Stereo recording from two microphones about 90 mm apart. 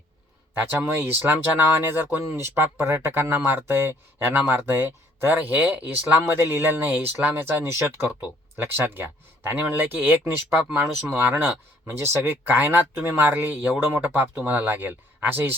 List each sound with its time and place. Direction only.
0.6 s speech: 25° right (ahead or behind)